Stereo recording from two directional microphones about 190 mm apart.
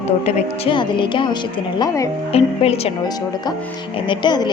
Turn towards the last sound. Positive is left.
turn(degrees=25)  # may be behind; listen again after turning